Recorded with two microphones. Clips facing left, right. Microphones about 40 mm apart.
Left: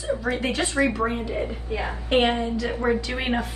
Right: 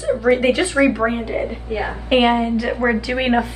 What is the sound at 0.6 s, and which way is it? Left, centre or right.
A woman's voice, right.